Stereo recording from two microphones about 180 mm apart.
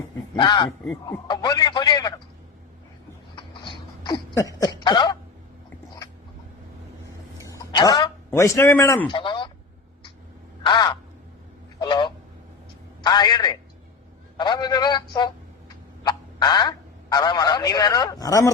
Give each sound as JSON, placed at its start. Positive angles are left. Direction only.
{"t": 0.3, "sound": "a man's voice", "side_deg": 25}
{"t": 3.3, "sound": "a sound", "side_deg": 25}
{"t": 4.8, "sound": "throat clearing", "side_deg": 25}
{"t": 7.3, "sound": "a sound", "side_deg": 20}
{"t": 9.0, "sound": "speech", "side_deg": 25}
{"t": 10.7, "sound": "a man's voice", "side_deg": 25}
{"t": 11.8, "sound": "honk", "side_deg": 25}
{"t": 13.0, "sound": "a man's voice", "side_deg": 25}